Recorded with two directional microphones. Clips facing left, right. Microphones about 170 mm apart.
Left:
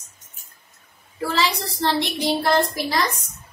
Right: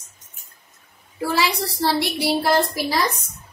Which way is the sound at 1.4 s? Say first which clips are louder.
Right 1 dB; 10° right (ahead or behind).